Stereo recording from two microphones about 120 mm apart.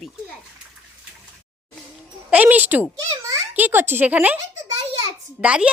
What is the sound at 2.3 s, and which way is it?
Speech, 15° right (ahead or behind).